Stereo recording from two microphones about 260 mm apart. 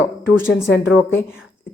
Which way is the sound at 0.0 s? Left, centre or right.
Left.